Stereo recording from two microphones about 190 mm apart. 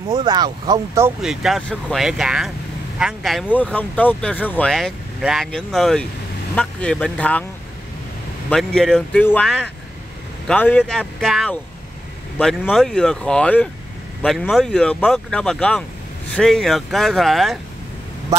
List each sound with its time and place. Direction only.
0.1 s speech: 20° right (ahead or behind)
1.2 s speech: centre (ahead or behind)
8.5 s speech: 5° left (ahead or behind)